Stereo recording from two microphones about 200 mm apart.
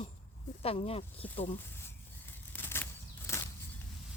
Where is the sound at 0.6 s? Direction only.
30° left (ahead or behind).